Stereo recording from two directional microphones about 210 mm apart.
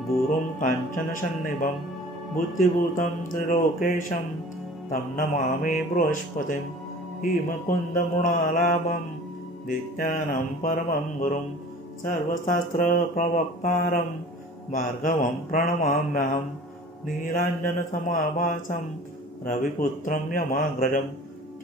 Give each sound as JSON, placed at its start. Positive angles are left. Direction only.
{"t": 0.6, "sound": "mantra", "side_deg": 40}
{"t": 5.2, "sound": "mantra", "side_deg": 40}